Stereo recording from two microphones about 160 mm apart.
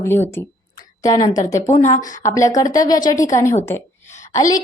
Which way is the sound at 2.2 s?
20° left (ahead or behind).